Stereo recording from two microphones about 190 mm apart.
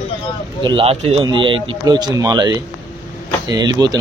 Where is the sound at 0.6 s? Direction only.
25° right (ahead or behind).